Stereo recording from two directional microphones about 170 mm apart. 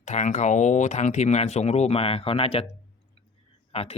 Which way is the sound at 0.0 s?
45° left (ahead or behind).